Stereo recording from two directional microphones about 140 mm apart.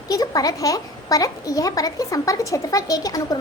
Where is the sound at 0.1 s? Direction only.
25° left (ahead or behind).